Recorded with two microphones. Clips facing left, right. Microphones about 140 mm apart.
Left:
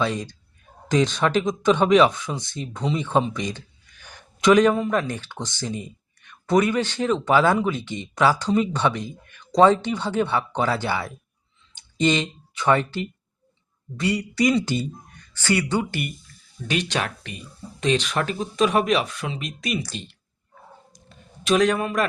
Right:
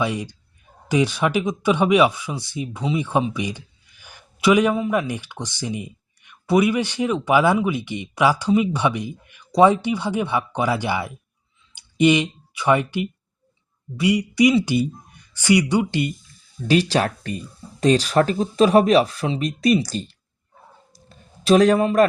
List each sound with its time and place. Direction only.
0.0 s speech: 10° right (ahead or behind)
16.6 s speech: 35° right (ahead or behind)
21.1 s a sound: 35° right (ahead or behind)